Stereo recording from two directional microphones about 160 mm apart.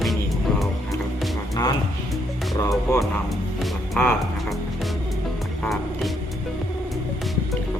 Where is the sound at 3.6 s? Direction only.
5° left (ahead or behind).